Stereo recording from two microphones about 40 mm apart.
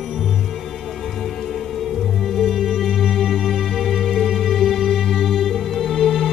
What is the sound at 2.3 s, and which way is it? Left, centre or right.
Music, centre.